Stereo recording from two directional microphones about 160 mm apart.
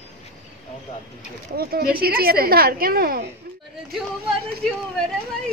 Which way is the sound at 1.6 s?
70° right (ahead or behind).